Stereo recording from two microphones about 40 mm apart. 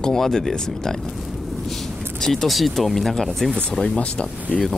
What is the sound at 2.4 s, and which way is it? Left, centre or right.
Speech, centre.